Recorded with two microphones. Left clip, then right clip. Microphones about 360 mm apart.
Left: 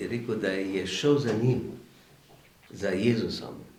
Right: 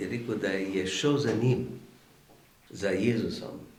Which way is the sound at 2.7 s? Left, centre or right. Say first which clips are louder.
Left 1 dB; centre.